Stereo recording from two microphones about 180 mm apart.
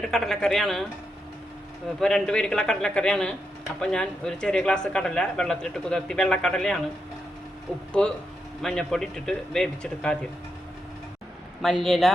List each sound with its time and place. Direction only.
0.0 s speech: centre (ahead or behind)
2.0 s speech: 5° left (ahead or behind)
8.0 s speech: 5° left (ahead or behind)
11.6 s speech: centre (ahead or behind)